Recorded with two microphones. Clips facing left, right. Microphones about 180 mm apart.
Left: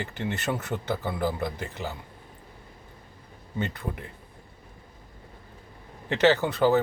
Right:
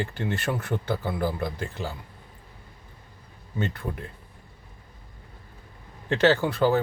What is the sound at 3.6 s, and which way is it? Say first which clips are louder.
Speech: right 2 dB; 20° left (ahead or behind).